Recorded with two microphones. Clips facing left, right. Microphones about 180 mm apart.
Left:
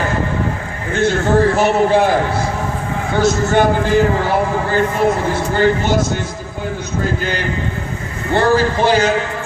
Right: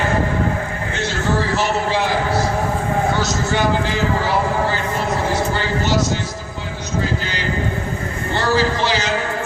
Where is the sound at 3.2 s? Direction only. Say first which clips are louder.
Left 6 dB; 55° left (ahead or behind).